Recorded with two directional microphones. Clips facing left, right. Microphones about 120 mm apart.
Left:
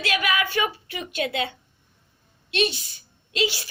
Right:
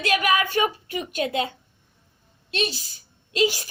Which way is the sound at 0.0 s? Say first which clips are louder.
Right 3 dB; 40° right (ahead or behind).